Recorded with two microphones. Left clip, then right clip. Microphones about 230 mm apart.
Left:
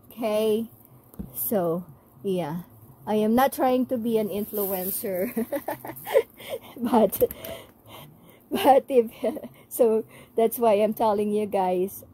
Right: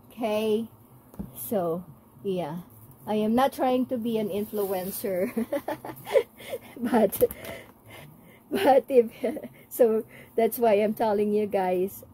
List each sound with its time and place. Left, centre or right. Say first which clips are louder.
0.1 s speech: left 2 dB; left
1.1 s a sound: left 2 dB; left
2.2 s speech: left 2 dB; left